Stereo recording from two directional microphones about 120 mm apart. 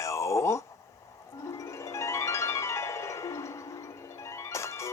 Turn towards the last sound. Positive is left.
turn(degrees=25)  # may be behind; listen again after turning